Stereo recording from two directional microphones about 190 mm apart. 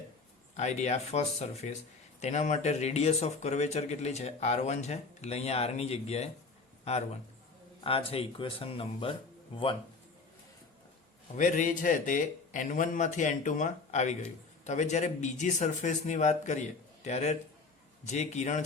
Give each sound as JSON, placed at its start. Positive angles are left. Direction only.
{"t": 0.5, "sound": "speech", "side_deg": 35}
{"t": 11.3, "sound": "a man's voice", "side_deg": 40}